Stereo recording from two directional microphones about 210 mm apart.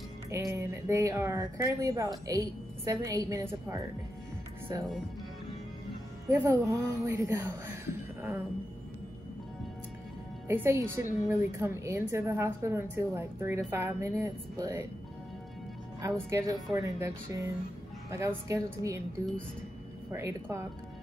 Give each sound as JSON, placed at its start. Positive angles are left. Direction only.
{"t": 0.3, "sound": "speech", "side_deg": -15}
{"t": 6.2, "sound": "speech", "side_deg": -10}
{"t": 10.5, "sound": "speech", "side_deg": -10}
{"t": 16.0, "sound": "speech", "side_deg": -15}
{"t": 20.1, "sound": "speech", "side_deg": -15}